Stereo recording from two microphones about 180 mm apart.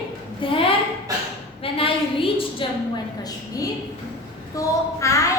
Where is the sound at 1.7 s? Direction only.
30° left (ahead or behind).